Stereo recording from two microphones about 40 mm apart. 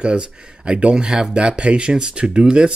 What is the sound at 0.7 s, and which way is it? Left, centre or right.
Speech, right.